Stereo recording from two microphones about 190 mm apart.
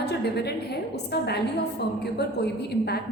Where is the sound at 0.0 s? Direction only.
60° left (ahead or behind).